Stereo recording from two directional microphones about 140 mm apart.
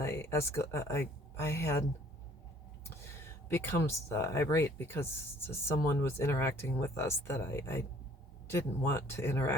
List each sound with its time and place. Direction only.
0.0 s speech: 20° left (ahead or behind)
3.0 s speech: 15° left (ahead or behind)